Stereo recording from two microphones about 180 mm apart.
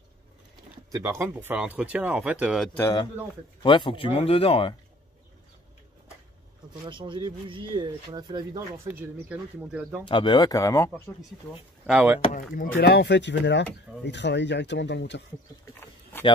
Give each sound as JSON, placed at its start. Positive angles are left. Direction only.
{"t": 0.9, "sound": "speech", "side_deg": -15}
{"t": 2.8, "sound": "speech", "side_deg": 20}
{"t": 6.9, "sound": "speech", "side_deg": -25}
{"t": 10.0, "sound": "speech", "side_deg": 25}
{"t": 11.8, "sound": "speech", "side_deg": -10}
{"t": 12.7, "sound": "speech", "side_deg": 70}